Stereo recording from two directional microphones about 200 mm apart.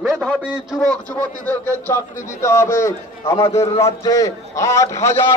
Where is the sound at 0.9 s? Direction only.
10° left (ahead or behind).